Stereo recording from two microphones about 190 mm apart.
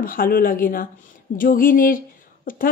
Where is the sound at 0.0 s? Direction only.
50° left (ahead or behind).